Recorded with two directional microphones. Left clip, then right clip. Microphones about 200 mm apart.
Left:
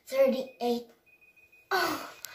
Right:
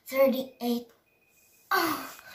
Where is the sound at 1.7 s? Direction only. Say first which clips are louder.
Right 2 dB; 15° left (ahead or behind).